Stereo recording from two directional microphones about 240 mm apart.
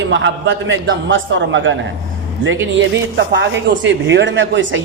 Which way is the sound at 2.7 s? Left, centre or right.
Right.